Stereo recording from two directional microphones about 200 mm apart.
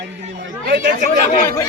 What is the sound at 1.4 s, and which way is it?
Speech, 15° left (ahead or behind).